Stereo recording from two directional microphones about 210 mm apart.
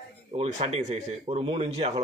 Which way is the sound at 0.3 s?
30° right (ahead or behind).